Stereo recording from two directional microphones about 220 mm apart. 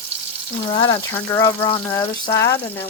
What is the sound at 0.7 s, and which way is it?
Speech, 20° left (ahead or behind).